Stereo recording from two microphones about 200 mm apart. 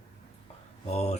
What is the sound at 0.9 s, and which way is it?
Speech, 30° left (ahead or behind).